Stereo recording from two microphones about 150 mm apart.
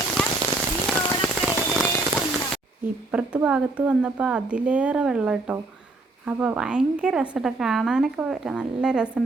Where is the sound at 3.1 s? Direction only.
10° right (ahead or behind).